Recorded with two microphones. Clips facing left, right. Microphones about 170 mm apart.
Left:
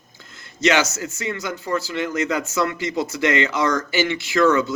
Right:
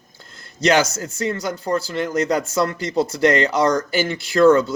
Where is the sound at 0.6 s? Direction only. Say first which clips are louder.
Right 2 dB; 35° right (ahead or behind).